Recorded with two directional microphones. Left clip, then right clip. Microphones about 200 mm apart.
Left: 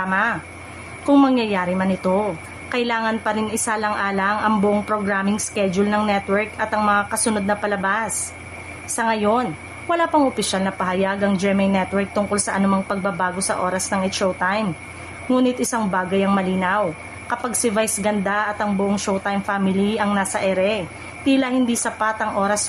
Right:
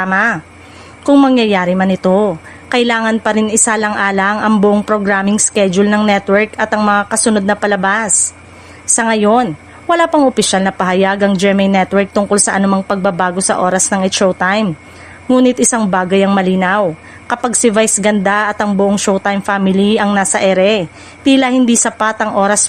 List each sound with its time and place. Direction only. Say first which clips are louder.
0.0 s a woman's voice: right 7 dB; 40° right (ahead or behind)